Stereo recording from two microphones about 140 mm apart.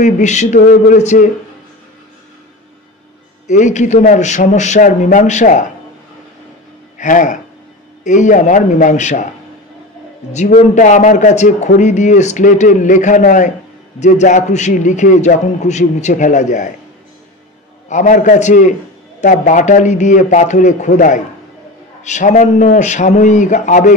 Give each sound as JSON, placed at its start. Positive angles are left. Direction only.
{"t": 0.0, "sound": "speech", "side_deg": 55}
{"t": 3.4, "sound": "speech", "side_deg": 60}
{"t": 7.0, "sound": "speech", "side_deg": 65}
{"t": 10.3, "sound": "speech", "side_deg": 55}
{"t": 13.9, "sound": "speech", "side_deg": 55}
{"t": 17.8, "sound": "speech", "side_deg": 60}